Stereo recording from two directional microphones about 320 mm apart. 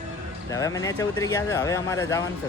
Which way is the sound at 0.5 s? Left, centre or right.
Centre.